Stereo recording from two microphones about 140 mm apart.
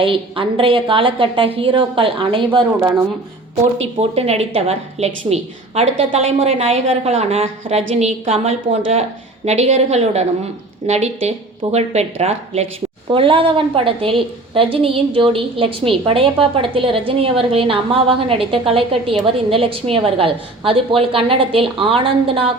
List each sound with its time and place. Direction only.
0.0 s a woman's voice: 40° right (ahead or behind)
4.1 s a woman's voice: 45° right (ahead or behind)